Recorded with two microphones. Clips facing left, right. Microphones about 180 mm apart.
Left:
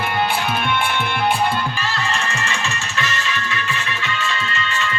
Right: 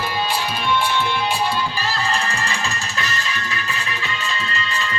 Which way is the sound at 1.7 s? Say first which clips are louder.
Right 1 dB; 35° right (ahead or behind).